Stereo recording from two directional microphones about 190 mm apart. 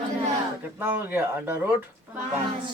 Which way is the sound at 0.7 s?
10° right (ahead or behind).